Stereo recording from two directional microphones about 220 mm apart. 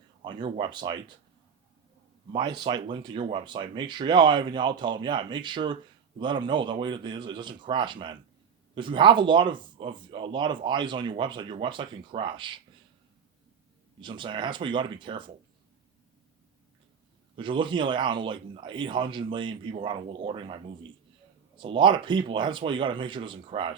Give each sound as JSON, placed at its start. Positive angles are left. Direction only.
{"t": 0.2, "sound": "a man's voice", "side_deg": -20}
{"t": 2.3, "sound": "a man's voice", "side_deg": -20}
{"t": 14.0, "sound": "a man's voice", "side_deg": -20}
{"t": 17.3, "sound": "a man's voice", "side_deg": -20}
{"t": 21.6, "sound": "a man's voice", "side_deg": -20}